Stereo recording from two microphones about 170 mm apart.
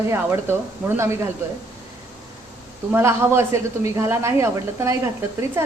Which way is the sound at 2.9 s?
15° right (ahead or behind).